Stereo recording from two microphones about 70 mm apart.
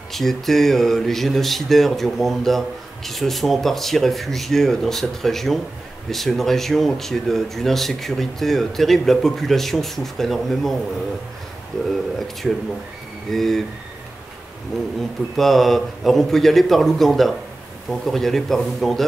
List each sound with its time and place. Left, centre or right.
0.1 s speech: centre
11.7 s speech: centre
14.7 s speech: centre